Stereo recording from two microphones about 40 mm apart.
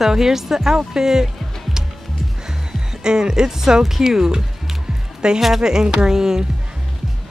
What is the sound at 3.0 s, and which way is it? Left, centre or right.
Speech, centre.